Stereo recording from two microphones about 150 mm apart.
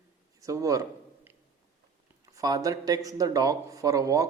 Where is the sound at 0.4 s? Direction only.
20° right (ahead or behind).